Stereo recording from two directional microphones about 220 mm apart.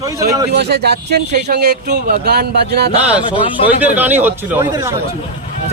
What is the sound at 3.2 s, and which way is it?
Speech, 25° left (ahead or behind).